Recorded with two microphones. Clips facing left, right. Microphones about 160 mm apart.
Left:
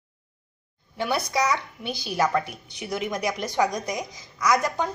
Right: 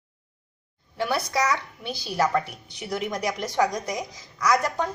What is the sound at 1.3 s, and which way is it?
Speech, 5° right (ahead or behind).